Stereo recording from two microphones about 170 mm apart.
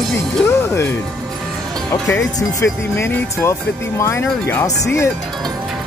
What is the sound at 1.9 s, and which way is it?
Speech, 15° left (ahead or behind).